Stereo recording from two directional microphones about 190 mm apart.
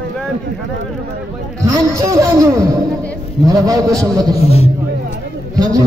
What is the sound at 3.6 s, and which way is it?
Speech, 20° right (ahead or behind).